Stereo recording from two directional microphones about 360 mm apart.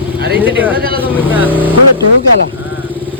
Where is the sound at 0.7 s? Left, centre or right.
Right.